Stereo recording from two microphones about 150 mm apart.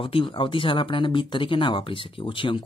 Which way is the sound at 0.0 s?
35° left (ahead or behind).